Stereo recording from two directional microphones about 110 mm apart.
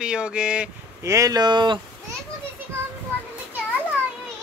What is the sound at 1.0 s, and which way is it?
Speech, 30° right (ahead or behind).